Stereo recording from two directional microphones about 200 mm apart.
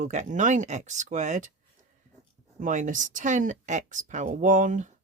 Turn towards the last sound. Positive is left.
turn(degrees=-40)  # may be behind; listen again after turning